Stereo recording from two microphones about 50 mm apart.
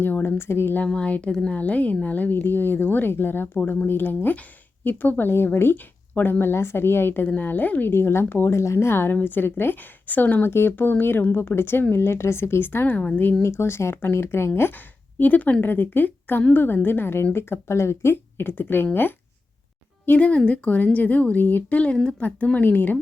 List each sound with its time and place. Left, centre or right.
0.0 s speech: left
0.9 s speech: left
5.7 s speech: left
6.4 s speech: left
7.3 s speech: left
8.4 s speech: left
13.4 s speech: left
15.2 s speech: left
17.3 s speech: left
18.1 s speech: left
20.1 s speech: left